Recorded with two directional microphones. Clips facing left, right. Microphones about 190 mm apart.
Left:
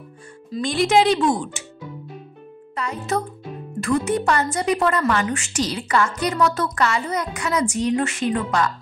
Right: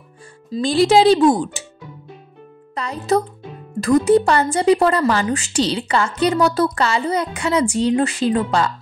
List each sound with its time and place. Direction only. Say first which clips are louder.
0.5 s a woman's voice: right 5 dB; 30° right (ahead or behind)
2.7 s a woman's voice: right 5 dB; 35° right (ahead or behind)